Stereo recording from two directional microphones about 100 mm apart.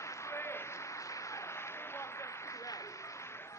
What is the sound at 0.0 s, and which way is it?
Applause, 30° left (ahead or behind).